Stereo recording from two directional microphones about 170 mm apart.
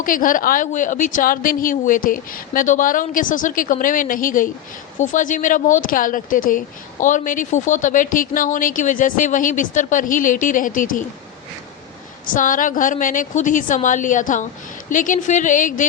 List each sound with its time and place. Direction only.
0.0 s a woman's voice: 50° left (ahead or behind)
12.3 s a woman's voice: 50° left (ahead or behind)